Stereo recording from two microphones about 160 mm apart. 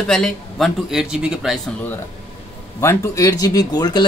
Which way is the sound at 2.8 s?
20° left (ahead or behind).